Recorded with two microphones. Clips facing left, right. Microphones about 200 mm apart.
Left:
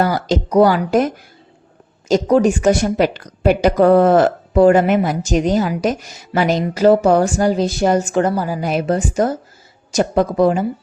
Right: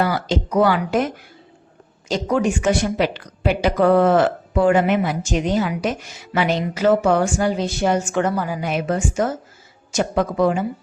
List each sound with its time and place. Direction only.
0.0 s a woman's voice: 40° left (ahead or behind)